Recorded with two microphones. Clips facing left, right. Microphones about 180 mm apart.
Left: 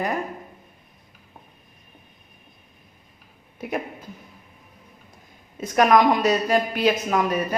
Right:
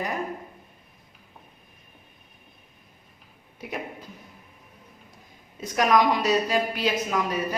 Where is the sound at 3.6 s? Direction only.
50° left (ahead or behind).